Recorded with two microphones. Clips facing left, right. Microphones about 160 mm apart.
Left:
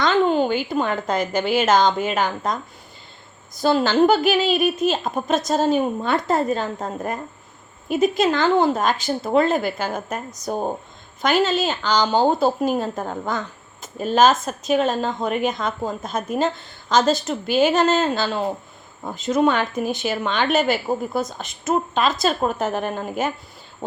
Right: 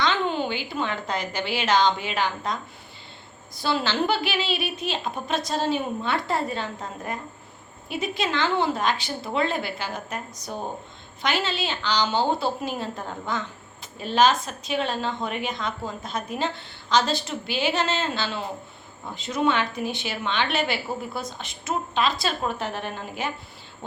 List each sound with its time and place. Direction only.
0.0 s a woman's voice: 45° left (ahead or behind)